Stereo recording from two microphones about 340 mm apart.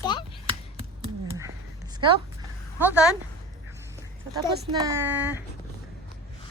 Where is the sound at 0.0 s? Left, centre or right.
Centre.